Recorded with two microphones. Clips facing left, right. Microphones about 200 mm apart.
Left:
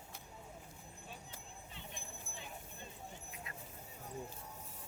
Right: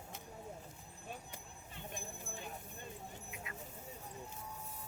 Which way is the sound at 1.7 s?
50° right (ahead or behind).